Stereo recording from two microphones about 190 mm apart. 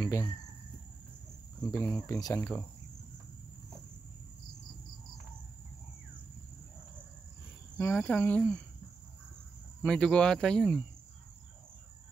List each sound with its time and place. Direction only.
0.0 s a sound: 15° left (ahead or behind)
1.6 s speech: 20° left (ahead or behind)
7.7 s speech: 15° left (ahead or behind)
9.8 s speech: 5° left (ahead or behind)